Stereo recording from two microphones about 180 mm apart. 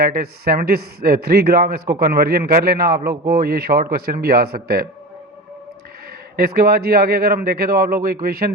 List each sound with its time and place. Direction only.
0.0 s a man's voice: 55° right (ahead or behind)
6.3 s a man's voice: 55° right (ahead or behind)